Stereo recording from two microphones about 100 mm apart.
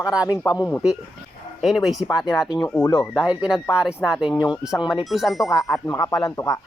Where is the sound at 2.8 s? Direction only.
30° left (ahead or behind).